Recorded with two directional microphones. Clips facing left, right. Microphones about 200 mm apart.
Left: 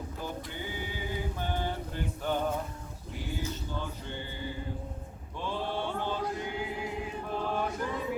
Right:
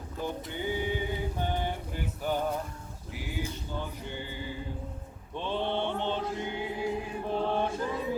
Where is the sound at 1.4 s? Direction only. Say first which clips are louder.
Right 1 dB; 15° right (ahead or behind).